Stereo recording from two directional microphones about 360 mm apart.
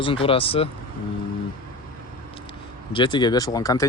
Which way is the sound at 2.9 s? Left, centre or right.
Centre.